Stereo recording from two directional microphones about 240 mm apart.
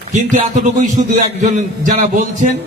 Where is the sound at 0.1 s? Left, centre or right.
Right.